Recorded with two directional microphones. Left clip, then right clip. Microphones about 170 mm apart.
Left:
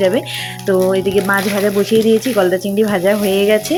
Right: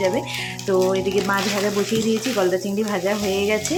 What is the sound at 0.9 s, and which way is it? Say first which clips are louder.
Speech: left 6 dB; 30° left (ahead or behind).